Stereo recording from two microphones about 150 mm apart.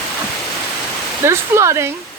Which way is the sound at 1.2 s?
20° right (ahead or behind).